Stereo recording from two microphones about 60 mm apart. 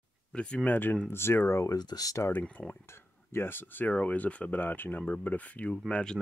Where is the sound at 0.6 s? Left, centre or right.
Left.